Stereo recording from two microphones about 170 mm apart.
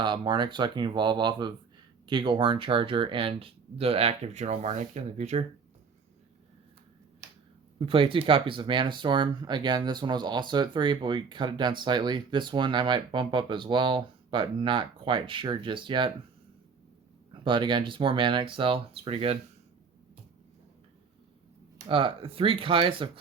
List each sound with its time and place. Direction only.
0.0 s speech: 25° right (ahead or behind); by 5.5 s 40° right (ahead or behind)
7.8 s speech: 30° right (ahead or behind)
17.3 s speech: 30° right (ahead or behind)
21.8 s speech: 30° right (ahead or behind)